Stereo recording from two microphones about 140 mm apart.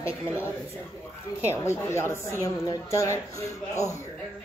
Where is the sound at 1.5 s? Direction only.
20° left (ahead or behind).